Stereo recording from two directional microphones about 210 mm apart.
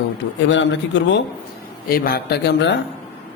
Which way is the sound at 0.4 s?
60° left (ahead or behind).